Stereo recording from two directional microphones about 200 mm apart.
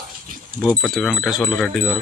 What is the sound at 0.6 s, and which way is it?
Speech, 5° left (ahead or behind).